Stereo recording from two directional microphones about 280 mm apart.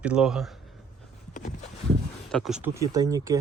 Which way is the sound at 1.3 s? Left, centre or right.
Left.